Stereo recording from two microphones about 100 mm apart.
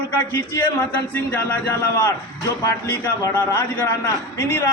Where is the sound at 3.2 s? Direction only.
30° left (ahead or behind).